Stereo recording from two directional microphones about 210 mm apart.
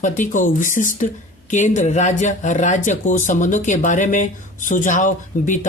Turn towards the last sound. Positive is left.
turn(degrees=35)  # may be behind; listen again after turning